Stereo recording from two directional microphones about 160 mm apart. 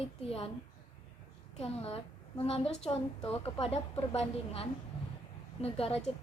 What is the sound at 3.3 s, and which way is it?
A woman's voice, 40° left (ahead or behind).